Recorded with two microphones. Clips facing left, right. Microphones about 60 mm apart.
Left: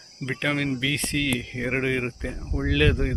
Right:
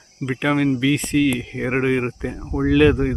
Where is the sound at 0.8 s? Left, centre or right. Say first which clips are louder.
Right 8 dB; centre.